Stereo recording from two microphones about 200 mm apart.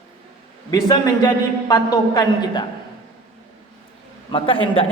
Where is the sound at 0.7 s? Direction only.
20° left (ahead or behind).